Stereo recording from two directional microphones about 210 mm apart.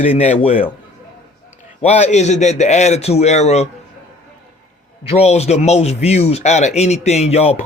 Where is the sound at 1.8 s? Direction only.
30° left (ahead or behind).